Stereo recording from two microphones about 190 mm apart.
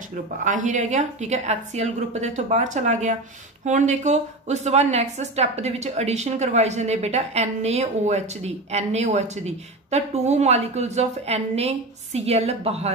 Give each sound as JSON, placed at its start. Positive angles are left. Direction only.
{"t": 0.4, "sound": "a woman's voice", "side_deg": -40}